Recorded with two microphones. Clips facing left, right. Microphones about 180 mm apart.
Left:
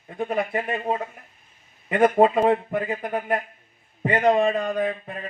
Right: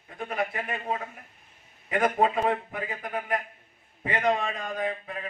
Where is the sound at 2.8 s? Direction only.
55° left (ahead or behind).